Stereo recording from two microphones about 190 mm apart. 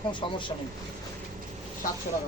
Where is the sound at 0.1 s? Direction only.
25° left (ahead or behind).